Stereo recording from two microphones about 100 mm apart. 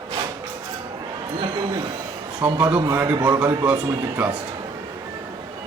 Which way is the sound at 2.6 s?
40° right (ahead or behind).